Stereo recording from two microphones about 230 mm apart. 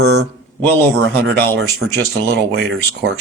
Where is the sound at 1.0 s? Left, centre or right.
Right.